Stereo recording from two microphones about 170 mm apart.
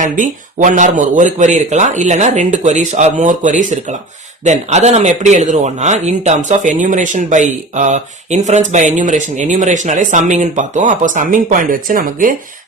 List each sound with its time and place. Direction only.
0.0 s speech: 50° right (ahead or behind)